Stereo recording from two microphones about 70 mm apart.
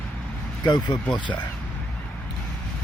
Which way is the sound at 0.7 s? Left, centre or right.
Left.